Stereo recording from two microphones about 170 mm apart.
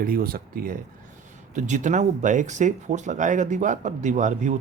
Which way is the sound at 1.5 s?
45° right (ahead or behind).